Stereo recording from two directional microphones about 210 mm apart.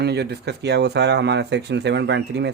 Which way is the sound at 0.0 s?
50° right (ahead or behind).